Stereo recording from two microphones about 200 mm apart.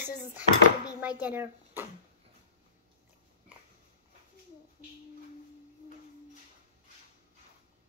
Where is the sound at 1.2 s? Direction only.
10° right (ahead or behind).